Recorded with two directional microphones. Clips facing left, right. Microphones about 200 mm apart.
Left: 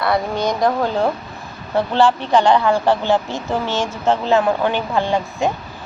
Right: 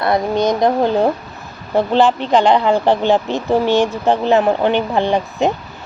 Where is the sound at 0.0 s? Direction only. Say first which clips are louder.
Right 3 dB; 20° right (ahead or behind).